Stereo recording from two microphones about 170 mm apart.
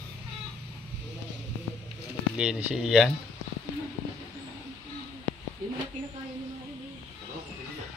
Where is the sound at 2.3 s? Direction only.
5° right (ahead or behind).